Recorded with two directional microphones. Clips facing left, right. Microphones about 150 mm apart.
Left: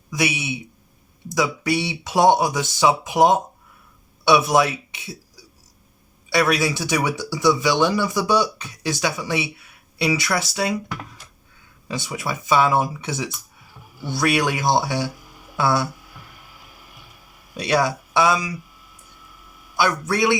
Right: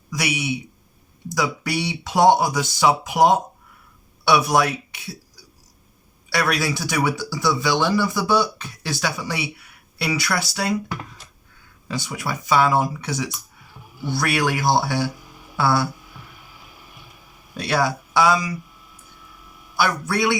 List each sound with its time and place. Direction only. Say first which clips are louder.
0.1 s speech: left 1 dB; 25° left (ahead or behind)
6.3 s speech: left 3 dB; 20° left (ahead or behind)
11.9 s speech: even; 20° left (ahead or behind)
17.6 s speech: left 1 dB; 20° left (ahead or behind)
19.8 s speech: left 1 dB; 20° left (ahead or behind)